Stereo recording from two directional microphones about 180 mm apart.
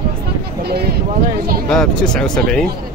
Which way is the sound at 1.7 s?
5° left (ahead or behind).